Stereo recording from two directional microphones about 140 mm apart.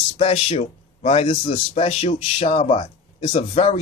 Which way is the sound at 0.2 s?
45° left (ahead or behind).